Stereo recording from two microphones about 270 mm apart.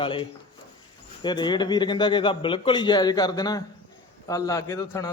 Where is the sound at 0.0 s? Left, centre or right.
Centre.